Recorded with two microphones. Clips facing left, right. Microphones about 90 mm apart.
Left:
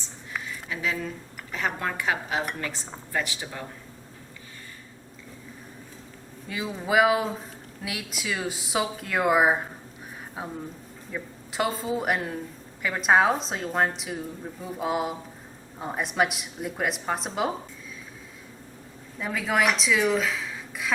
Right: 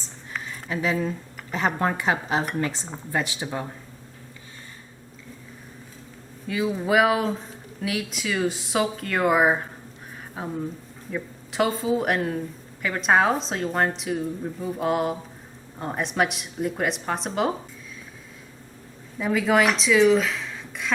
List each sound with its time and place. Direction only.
0.4 s speech: 35° right (ahead or behind)
6.5 s speech: centre (ahead or behind)
19.2 s speech: centre (ahead or behind)